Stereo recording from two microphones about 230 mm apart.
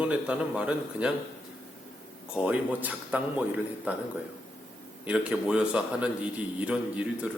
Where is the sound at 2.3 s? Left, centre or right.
Centre.